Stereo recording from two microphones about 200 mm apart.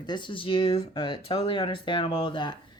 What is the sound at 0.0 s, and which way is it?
Speech, 20° left (ahead or behind).